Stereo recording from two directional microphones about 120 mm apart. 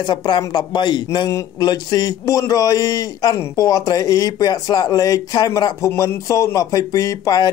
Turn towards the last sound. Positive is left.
turn(degrees=30)  # may be behind; listen again after turning